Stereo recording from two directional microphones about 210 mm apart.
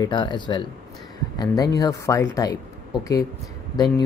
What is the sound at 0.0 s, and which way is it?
Speech, 20° left (ahead or behind).